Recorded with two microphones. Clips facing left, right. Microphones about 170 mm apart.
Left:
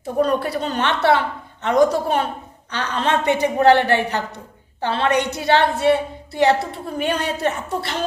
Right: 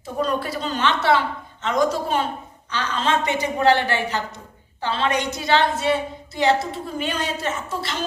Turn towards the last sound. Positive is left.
turn(degrees=60)  # may be behind; listen again after turning